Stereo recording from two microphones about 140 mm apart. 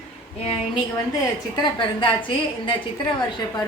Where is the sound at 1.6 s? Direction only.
35° left (ahead or behind).